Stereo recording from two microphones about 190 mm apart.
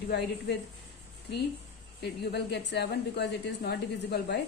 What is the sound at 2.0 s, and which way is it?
A woman's voice, 60° left (ahead or behind).